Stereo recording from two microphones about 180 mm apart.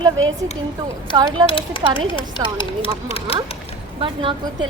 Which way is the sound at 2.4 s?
20° right (ahead or behind).